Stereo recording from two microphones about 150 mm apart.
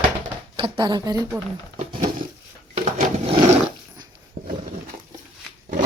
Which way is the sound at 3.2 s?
40° right (ahead or behind).